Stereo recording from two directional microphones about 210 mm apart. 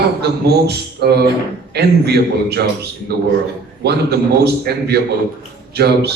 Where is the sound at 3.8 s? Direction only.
50° right (ahead or behind).